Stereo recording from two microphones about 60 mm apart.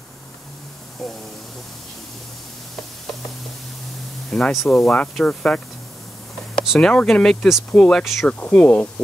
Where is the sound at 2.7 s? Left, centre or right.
Centre.